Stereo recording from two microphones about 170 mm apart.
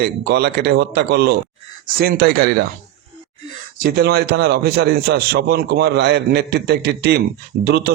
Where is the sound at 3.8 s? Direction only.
70° right (ahead or behind).